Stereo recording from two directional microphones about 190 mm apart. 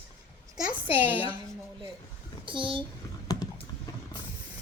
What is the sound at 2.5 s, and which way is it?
Speech, 25° right (ahead or behind).